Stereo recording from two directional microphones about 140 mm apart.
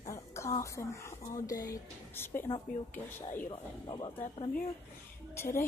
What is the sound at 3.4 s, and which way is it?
Speech, 35° left (ahead or behind).